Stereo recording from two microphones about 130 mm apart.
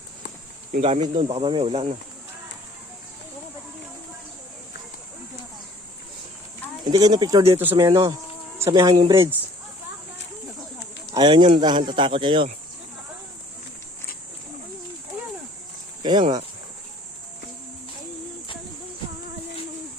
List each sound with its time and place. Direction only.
0.8 s speech: 45° right (ahead or behind)
6.8 s speech: 30° right (ahead or behind)
11.1 s speech: 35° right (ahead or behind)
16.0 s speech: 35° right (ahead or behind)